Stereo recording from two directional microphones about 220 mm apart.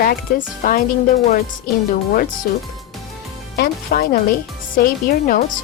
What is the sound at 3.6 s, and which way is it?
Speech, 40° left (ahead or behind).